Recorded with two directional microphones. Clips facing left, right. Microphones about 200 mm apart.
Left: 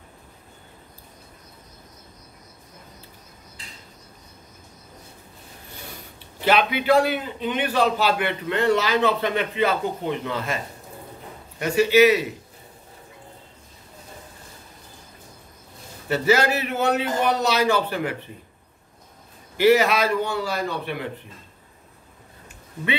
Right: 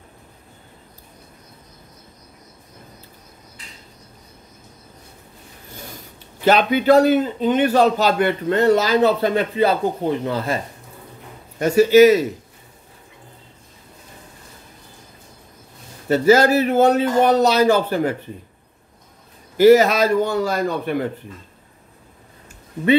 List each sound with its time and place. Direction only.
6.4 s a man's voice: 45° right (ahead or behind)
11.6 s a man's voice: 40° right (ahead or behind)
16.1 s a man's voice: 40° right (ahead or behind)
19.5 s a man's voice: 40° right (ahead or behind)